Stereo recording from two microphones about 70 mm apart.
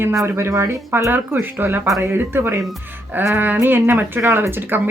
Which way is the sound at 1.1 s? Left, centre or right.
Right.